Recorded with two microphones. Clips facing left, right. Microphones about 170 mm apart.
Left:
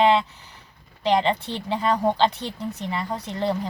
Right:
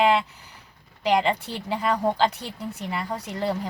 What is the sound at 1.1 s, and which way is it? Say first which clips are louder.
A woman's voice: left 1 dB; 10° right (ahead or behind).